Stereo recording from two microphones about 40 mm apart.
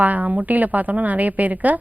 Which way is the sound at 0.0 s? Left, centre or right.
Right.